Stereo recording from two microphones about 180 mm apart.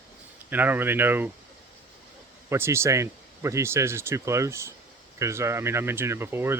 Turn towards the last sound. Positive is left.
turn(degrees=-15)  # may be behind; listen again after turning